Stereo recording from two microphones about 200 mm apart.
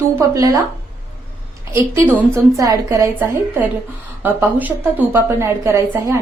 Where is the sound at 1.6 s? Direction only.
15° right (ahead or behind).